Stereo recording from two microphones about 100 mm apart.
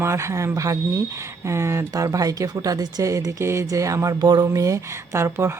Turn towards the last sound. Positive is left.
turn(degrees=-30)  # may be behind; listen again after turning